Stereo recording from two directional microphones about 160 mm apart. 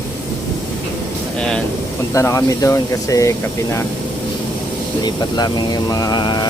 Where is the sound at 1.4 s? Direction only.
5° left (ahead or behind).